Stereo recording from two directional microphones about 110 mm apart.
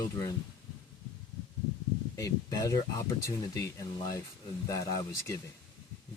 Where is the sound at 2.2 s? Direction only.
30° left (ahead or behind).